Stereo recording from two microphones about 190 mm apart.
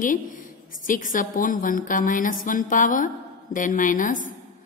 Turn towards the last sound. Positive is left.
turn(degrees=45)  # may be behind; listen again after turning